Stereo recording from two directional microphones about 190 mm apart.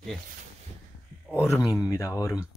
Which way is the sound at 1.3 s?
15° left (ahead or behind).